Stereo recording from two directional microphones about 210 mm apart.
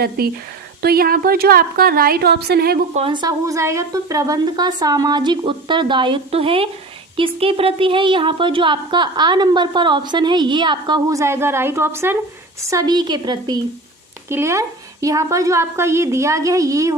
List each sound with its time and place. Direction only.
0.2 s a woman's voice: 45° right (ahead or behind)
2.9 s a woman's voice: 25° right (ahead or behind)